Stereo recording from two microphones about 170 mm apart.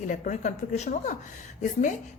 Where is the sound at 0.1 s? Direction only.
45° left (ahead or behind).